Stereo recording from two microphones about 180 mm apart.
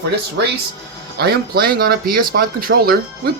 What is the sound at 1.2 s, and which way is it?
Speech, 60° right (ahead or behind).